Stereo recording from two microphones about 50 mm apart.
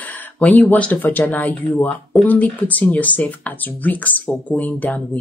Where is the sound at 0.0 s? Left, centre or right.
Left.